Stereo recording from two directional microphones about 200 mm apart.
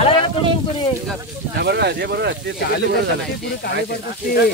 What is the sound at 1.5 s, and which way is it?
Speech, 55° right (ahead or behind).